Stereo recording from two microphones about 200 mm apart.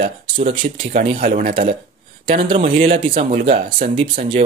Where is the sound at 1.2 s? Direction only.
45° right (ahead or behind).